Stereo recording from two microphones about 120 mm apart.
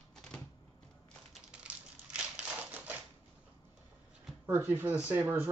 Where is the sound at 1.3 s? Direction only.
10° right (ahead or behind).